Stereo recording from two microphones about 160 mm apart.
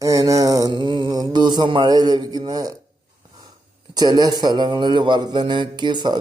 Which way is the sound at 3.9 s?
25° right (ahead or behind).